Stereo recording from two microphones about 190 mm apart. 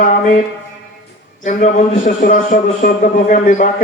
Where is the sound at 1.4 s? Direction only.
40° left (ahead or behind).